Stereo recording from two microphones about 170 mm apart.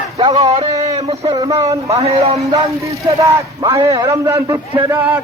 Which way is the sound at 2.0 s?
35° right (ahead or behind).